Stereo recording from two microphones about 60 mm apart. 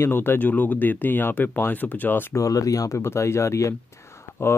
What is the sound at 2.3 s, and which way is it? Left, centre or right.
Speech, left.